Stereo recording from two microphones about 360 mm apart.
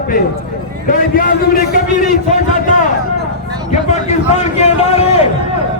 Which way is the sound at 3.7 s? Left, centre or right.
Centre.